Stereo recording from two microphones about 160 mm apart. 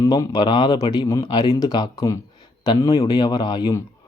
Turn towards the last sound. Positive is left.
turn(degrees=25)  # may be behind; listen again after turning